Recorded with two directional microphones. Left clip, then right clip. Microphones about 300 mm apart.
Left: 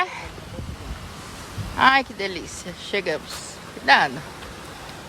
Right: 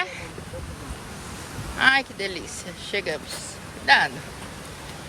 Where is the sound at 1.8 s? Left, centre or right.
Centre.